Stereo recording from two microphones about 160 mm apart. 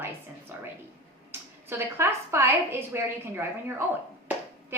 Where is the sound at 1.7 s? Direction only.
15° right (ahead or behind).